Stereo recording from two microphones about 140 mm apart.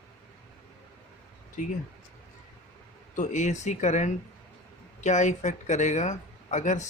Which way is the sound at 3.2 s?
60° left (ahead or behind).